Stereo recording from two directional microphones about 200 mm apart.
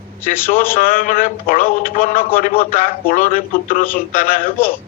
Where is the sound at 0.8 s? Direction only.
45° left (ahead or behind).